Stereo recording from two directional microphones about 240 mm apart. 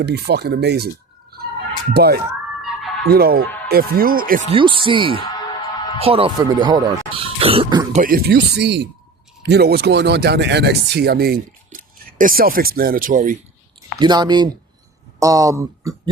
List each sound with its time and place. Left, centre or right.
0.0 s speech: right
1.9 s speech: right
7.9 s speech: right
14.0 s speech: centre